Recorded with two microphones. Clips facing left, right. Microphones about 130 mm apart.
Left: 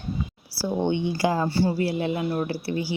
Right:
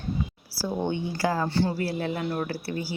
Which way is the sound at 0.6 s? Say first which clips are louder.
Left 4 dB; 20° left (ahead or behind).